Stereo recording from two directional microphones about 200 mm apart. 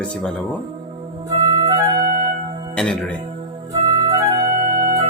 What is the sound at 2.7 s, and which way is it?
Speech, 5° left (ahead or behind).